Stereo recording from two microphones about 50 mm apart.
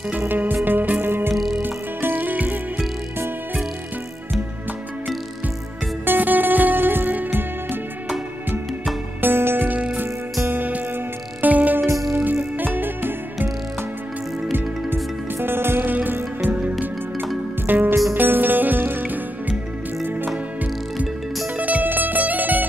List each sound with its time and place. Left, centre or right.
0.2 s music: right
1.3 s music: centre
1.6 s music: right
6.0 s music: right
9.2 s music: right
10.5 s music: right
15.3 s music: right
15.9 s music: right
17.6 s music: right
21.5 s music: right